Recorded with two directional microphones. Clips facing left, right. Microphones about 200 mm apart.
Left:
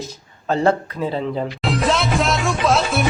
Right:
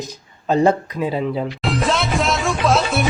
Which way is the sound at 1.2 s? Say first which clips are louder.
Right 1 dB; 5° right (ahead or behind).